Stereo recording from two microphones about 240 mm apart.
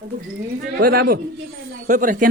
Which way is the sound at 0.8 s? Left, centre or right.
Right.